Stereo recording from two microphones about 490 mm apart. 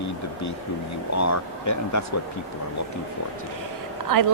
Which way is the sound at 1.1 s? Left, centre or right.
Left.